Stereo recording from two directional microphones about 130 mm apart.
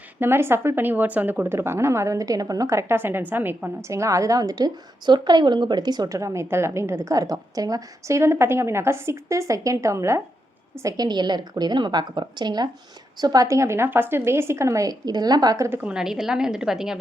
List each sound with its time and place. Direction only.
0.2 s a woman's voice: 20° right (ahead or behind)
15.8 s a woman's voice: 5° right (ahead or behind)